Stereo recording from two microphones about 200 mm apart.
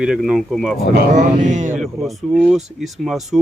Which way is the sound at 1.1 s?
40° right (ahead or behind).